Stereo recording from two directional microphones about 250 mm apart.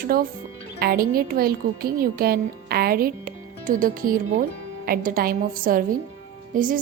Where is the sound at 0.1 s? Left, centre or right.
Right.